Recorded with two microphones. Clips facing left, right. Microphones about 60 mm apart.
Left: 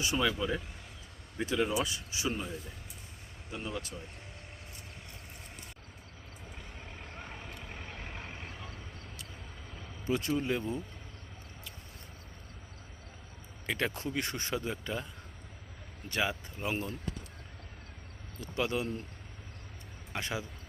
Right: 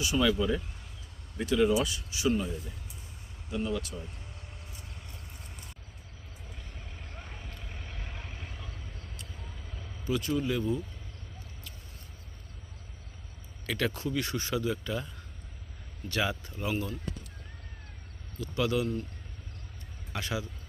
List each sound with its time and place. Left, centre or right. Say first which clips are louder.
0.2 s speech: right 7 dB; centre
3.5 s speech: right 6 dB; left
7.1 s vehicle: left 2 dB; centre
7.9 s vehicle: left 1 dB; left
10.1 s speech: right 1 dB; left
13.7 s speech: right 2 dB; left
16.0 s speech: right 2 dB; left
18.3 s speech: right 4 dB; left
20.1 s speech: right 2 dB; left